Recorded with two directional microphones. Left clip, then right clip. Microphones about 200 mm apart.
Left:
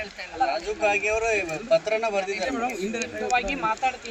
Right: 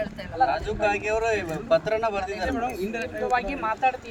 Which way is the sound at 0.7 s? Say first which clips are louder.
Left 1 dB; 10° left (ahead or behind).